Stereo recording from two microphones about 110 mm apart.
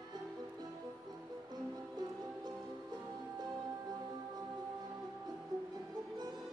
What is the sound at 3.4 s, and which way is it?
Music, 35° right (ahead or behind).